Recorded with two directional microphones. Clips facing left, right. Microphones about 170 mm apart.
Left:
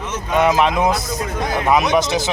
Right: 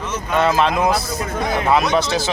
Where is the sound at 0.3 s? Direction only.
15° left (ahead or behind).